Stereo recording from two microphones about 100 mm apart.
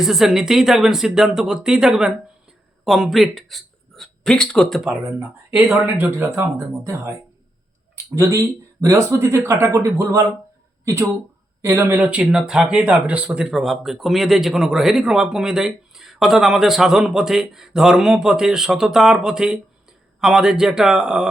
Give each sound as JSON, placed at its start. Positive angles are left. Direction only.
{"t": 0.0, "sound": "speech", "side_deg": -5}
{"t": 5.8, "sound": "speech", "side_deg": -20}
{"t": 11.9, "sound": "speech", "side_deg": -10}